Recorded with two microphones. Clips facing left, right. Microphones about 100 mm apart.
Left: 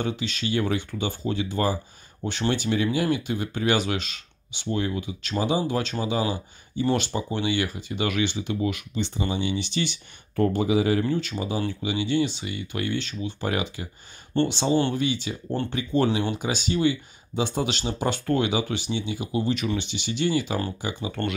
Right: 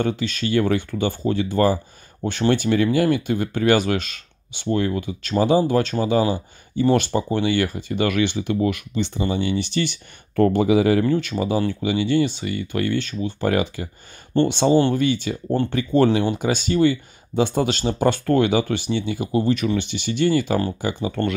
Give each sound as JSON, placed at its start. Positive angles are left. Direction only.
{"t": 0.0, "sound": "speech", "side_deg": -45}